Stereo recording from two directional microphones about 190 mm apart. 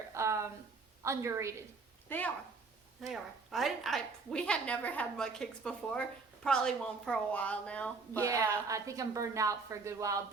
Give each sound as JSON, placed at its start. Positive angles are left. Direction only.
{"t": 0.1, "sound": "a sound", "side_deg": -15}
{"t": 1.0, "sound": "a woman's voice", "side_deg": -15}
{"t": 2.0, "sound": "a woman's voice", "side_deg": 10}
{"t": 8.2, "sound": "a woman's voice", "side_deg": -15}